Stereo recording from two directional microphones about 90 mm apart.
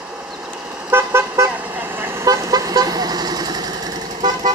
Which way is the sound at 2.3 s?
40° right (ahead or behind).